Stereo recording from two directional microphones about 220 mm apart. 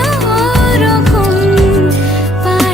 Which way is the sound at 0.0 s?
Centre (ahead or behind).